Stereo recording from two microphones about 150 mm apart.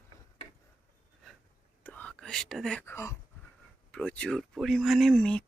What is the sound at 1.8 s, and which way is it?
Whispering, 10° left (ahead or behind).